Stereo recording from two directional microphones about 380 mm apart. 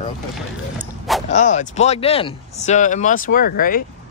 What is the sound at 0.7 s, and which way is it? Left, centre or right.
Speech, centre.